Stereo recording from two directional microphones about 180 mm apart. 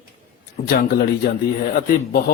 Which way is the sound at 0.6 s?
55° left (ahead or behind).